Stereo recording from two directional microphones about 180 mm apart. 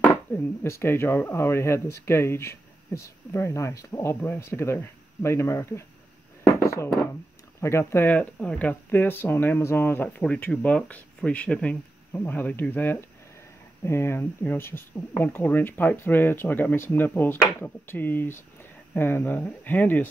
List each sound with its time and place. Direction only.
0.0 s speech: 10° left (ahead or behind)
6.6 s a sound: 15° left (ahead or behind)
7.6 s speech: 15° left (ahead or behind)